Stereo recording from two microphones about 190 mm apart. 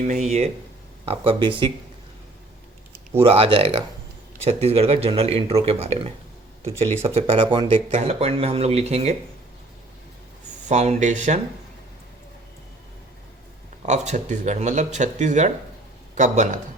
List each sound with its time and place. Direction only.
0.0 s speech: 40° right (ahead or behind)
3.1 s speech: 30° right (ahead or behind)
7.9 s speech: 35° right (ahead or behind)
10.7 s speech: 35° right (ahead or behind)
13.8 s speech: 40° right (ahead or behind)